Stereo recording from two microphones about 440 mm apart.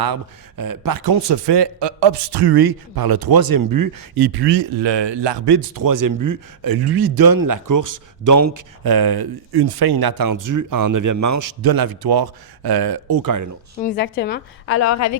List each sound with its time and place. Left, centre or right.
0.0 s a man's voice: right
8.8 s a man's voice: right
13.7 s a woman's voice: left
14.8 s a woman's voice: left